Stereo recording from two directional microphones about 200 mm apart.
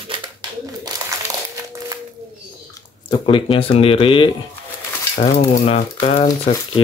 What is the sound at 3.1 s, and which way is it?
Speech, 25° left (ahead or behind).